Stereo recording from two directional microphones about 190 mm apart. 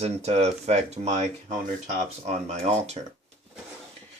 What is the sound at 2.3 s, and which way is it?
Speech, 35° right (ahead or behind).